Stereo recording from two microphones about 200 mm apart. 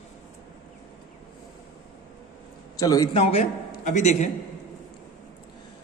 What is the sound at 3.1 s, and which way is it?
A man's voice, 30° left (ahead or behind).